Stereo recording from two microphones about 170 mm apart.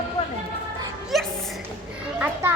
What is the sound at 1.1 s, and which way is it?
Music, centre (ahead or behind).